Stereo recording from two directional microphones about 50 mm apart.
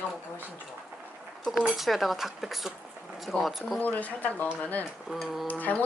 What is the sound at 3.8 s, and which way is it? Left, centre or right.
Speech, left.